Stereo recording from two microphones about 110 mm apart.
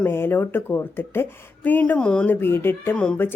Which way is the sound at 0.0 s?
20° left (ahead or behind).